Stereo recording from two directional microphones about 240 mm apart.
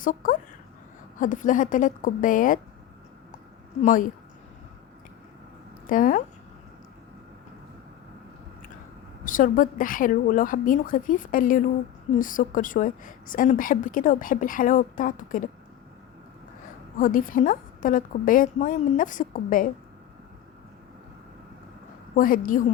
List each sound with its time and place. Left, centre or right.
0.0 s a woman's voice: left
3.8 s a woman's voice: left
5.9 s a woman's voice: left
9.2 s a woman's voice: left
17.0 s a woman's voice: left
22.1 s a woman's voice: left